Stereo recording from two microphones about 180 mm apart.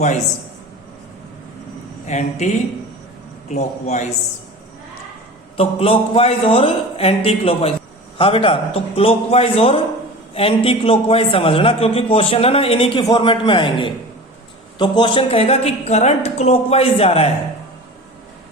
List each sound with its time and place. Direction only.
2.0 s a man's voice: 40° left (ahead or behind)
5.5 s a man's voice: 30° left (ahead or behind)